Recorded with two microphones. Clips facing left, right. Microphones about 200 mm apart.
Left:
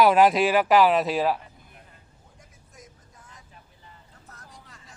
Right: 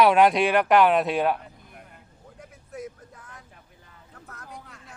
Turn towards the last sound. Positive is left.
turn(degrees=-60)  # may be behind; listen again after turning